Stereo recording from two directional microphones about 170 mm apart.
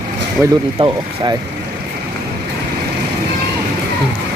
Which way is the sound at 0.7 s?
30° right (ahead or behind).